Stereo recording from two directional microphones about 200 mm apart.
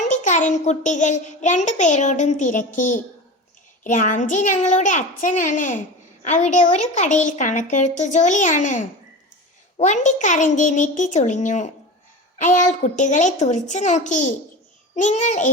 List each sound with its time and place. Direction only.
0.1 s a child's voice: 40° left (ahead or behind)